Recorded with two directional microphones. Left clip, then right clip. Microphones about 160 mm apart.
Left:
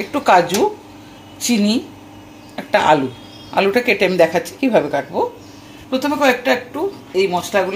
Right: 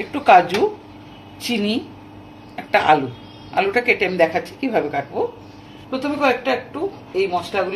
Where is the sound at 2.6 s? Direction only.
45° left (ahead or behind).